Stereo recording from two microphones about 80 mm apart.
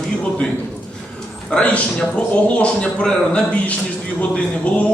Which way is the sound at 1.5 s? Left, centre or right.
Centre.